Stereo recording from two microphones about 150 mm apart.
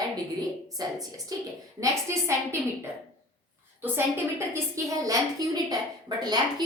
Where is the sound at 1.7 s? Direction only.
20° right (ahead or behind).